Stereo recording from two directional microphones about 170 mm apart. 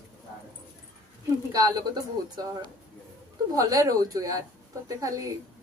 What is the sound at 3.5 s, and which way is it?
Speech, 20° right (ahead or behind).